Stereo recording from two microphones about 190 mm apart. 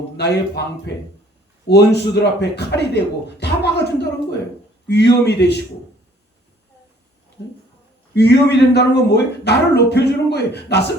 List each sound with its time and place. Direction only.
0.2 s speech: 60° left (ahead or behind)
1.6 s speech: 60° left (ahead or behind)
8.1 s speech: 60° left (ahead or behind)